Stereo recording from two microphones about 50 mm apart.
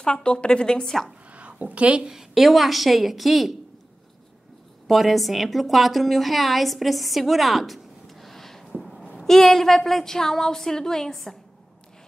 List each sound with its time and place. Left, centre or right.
0.0 s a woman's voice: centre
1.3 s a sound: right
2.0 s speech: centre
4.8 s a woman's voice: centre
8.7 s a sound: centre
9.2 s a woman's voice: centre